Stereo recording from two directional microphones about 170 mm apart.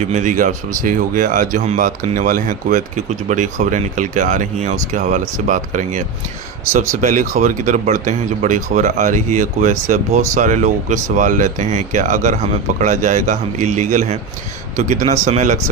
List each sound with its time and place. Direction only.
0.1 s speech: 45° right (ahead or behind)